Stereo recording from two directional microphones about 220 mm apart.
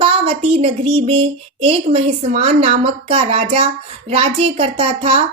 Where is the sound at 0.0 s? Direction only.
25° right (ahead or behind).